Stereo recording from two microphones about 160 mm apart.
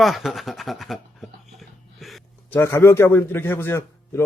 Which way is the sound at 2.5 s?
15° left (ahead or behind).